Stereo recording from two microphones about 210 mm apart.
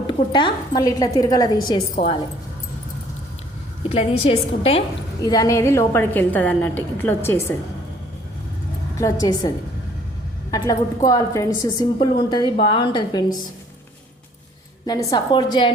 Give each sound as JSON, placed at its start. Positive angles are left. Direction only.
{"t": 0.1, "sound": "a woman's voice", "side_deg": 20}
{"t": 3.8, "sound": "a woman's voice", "side_deg": 30}
{"t": 5.2, "sound": "a woman's voice", "side_deg": 20}
{"t": 9.0, "sound": "a woman's voice", "side_deg": 15}
{"t": 10.5, "sound": "a woman's voice", "side_deg": 15}
{"t": 14.8, "sound": "a woman's voice", "side_deg": 20}